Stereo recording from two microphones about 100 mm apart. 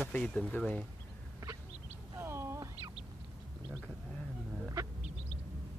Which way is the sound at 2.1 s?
25° right (ahead or behind).